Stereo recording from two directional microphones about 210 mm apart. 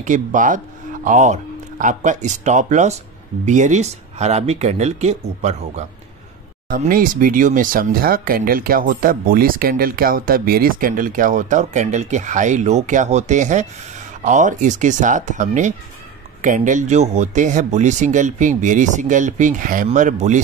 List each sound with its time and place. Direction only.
0.0 s speech: 35° right (ahead or behind)